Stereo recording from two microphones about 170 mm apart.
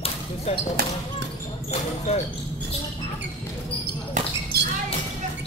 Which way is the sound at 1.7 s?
40° left (ahead or behind).